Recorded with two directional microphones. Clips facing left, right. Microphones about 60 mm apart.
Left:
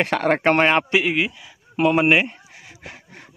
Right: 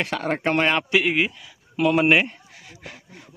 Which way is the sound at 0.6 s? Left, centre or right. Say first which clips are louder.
Left 4 dB; left.